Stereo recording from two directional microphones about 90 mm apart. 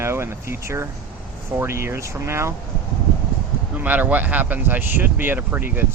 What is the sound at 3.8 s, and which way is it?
Speech, 15° right (ahead or behind).